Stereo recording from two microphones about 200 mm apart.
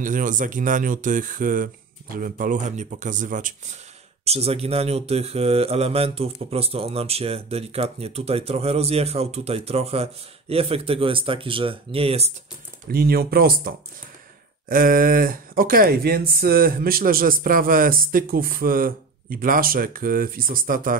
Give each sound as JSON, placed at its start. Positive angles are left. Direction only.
{"t": 0.0, "sound": "speech", "side_deg": -40}
{"t": 12.8, "sound": "speech", "side_deg": -50}